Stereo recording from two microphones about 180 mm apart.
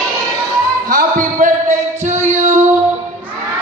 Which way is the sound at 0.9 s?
45° right (ahead or behind).